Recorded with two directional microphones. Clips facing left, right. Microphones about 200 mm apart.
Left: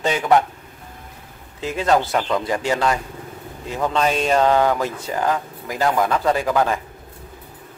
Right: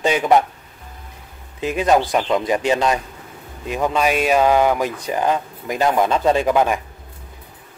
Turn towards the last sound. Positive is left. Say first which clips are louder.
# right 3 dB
turn(degrees=-20)  # may be behind; listen again after turning